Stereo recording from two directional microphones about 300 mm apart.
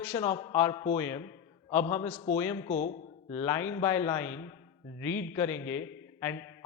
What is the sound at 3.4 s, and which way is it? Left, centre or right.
Speech, centre.